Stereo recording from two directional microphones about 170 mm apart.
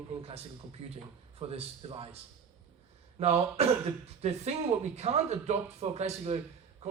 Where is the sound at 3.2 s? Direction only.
35° right (ahead or behind).